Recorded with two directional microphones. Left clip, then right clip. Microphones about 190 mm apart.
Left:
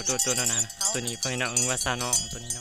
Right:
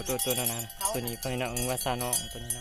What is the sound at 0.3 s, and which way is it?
Cowbell, 5° left (ahead or behind).